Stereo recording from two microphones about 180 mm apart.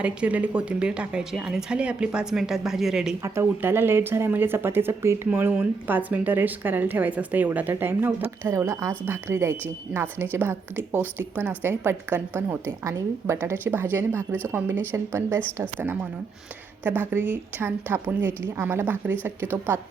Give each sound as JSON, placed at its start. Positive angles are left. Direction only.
{"t": 0.0, "sound": "speech", "side_deg": -10}
{"t": 16.8, "sound": "speech", "side_deg": -10}